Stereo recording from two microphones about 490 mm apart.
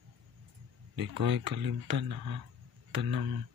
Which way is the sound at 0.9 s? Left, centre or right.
Right.